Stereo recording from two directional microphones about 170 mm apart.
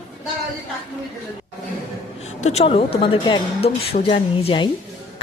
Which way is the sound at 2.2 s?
40° left (ahead or behind).